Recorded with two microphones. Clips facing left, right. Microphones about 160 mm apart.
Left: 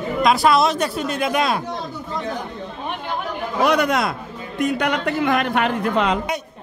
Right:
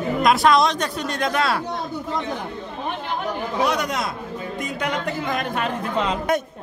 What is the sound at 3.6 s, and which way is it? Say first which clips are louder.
A man's voice: left 5 dB; 60° left (ahead or behind).